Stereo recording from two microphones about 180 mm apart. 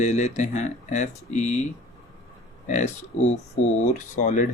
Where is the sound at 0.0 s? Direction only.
40° left (ahead or behind).